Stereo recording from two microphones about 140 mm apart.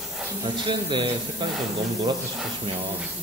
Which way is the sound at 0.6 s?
35° right (ahead or behind).